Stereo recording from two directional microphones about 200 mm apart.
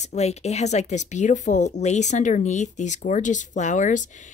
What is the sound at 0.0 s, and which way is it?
Speech, 35° left (ahead or behind).